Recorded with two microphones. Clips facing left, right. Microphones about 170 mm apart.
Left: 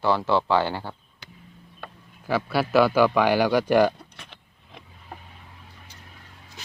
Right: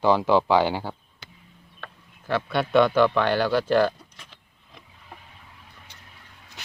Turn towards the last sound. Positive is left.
turn(degrees=65)  # may be behind; listen again after turning